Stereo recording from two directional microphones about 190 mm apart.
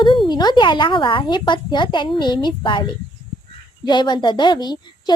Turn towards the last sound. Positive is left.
turn(degrees=20)  # may be behind; listen again after turning